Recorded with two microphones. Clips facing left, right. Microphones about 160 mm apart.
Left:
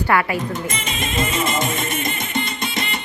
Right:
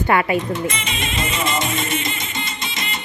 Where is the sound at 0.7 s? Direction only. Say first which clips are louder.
Left 1 dB; 45° left (ahead or behind).